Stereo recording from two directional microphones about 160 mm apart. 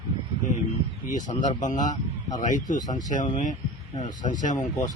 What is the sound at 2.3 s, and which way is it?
Speech, 50° left (ahead or behind).